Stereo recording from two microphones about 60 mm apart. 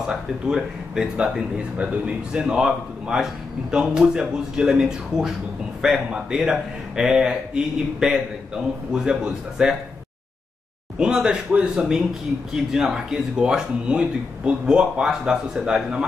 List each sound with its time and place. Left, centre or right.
0.0 s speech: centre
11.0 s speech: centre